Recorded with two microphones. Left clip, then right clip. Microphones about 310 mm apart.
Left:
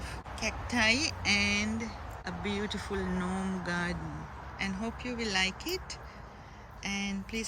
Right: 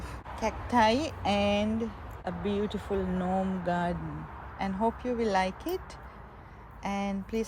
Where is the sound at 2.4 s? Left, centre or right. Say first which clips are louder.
Right 3 dB; centre.